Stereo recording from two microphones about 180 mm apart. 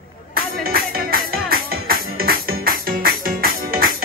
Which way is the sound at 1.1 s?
55° right (ahead or behind).